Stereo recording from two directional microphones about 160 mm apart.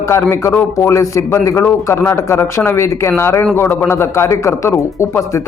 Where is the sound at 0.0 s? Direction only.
15° left (ahead or behind).